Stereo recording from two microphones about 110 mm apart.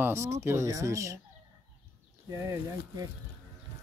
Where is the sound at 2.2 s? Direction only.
25° right (ahead or behind).